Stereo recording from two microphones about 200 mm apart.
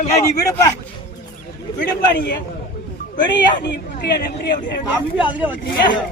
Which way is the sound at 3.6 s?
55° left (ahead or behind).